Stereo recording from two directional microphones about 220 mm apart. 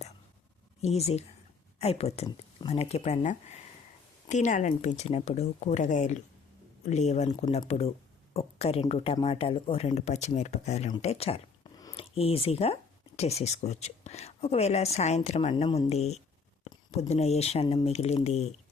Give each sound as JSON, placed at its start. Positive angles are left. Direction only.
{"t": 0.8, "sound": "speech", "side_deg": 30}